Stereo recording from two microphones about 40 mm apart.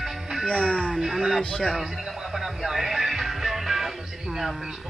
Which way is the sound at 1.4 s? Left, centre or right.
Centre.